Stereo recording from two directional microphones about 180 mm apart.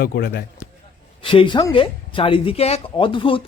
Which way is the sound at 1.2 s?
30° left (ahead or behind).